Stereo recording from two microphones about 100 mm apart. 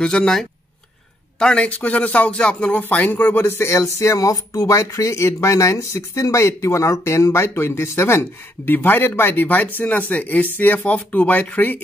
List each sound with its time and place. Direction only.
0.0 s speech: 10° left (ahead or behind)